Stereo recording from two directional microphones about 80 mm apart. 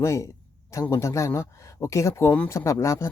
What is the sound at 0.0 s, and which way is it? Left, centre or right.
Speech, left.